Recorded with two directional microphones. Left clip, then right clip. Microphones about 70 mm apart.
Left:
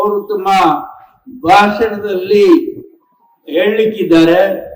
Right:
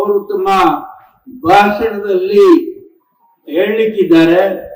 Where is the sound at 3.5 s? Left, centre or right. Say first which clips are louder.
Left 1 dB; left.